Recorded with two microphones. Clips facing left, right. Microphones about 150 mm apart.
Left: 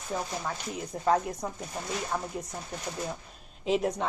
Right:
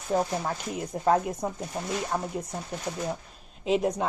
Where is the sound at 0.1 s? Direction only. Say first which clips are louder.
Right 8 dB; 35° right (ahead or behind).